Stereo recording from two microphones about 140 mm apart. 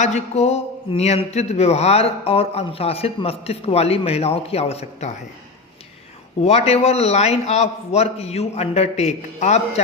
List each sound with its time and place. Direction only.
0.0 s speech: 55° left (ahead or behind)
6.4 s speech: 50° left (ahead or behind)